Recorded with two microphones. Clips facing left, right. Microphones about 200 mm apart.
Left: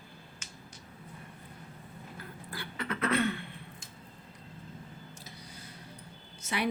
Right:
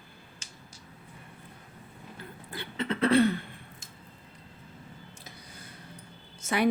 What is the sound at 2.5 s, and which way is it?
Beatboxing, 25° right (ahead or behind).